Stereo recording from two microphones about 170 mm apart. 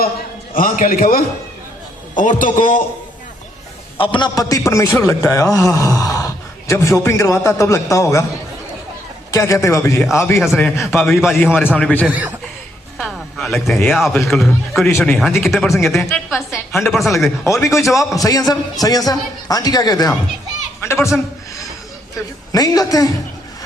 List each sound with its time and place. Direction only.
0.5 s a man's voice: 55° left (ahead or behind)
3.9 s a man's voice: 30° left (ahead or behind)
9.3 s a man's voice: 20° left (ahead or behind)
10.6 s a man's voice: centre (ahead or behind)
11.5 s a man's voice: 10° left (ahead or behind)
12.0 s a man's voice: 10° right (ahead or behind)
17.4 s a man's voice: 15° left (ahead or behind)
17.7 s a man's voice: centre (ahead or behind)
18.1 s a man's voice: 20° left (ahead or behind)
22.5 s a man's voice: 20° left (ahead or behind)